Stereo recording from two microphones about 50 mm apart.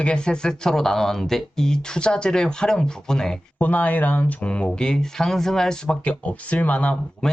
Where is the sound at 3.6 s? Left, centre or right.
Left.